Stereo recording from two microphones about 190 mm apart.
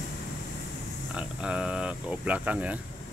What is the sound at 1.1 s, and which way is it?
Speech, 5° right (ahead or behind).